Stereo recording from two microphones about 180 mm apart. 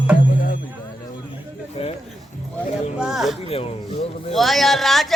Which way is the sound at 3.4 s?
35° left (ahead or behind).